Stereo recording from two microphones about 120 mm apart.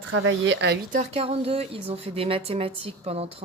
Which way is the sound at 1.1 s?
55° right (ahead or behind).